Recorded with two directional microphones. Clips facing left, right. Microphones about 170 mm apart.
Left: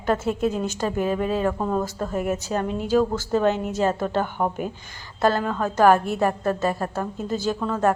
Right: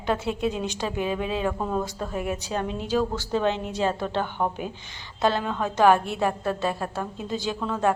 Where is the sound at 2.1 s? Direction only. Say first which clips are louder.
Left 4 dB; 45° left (ahead or behind).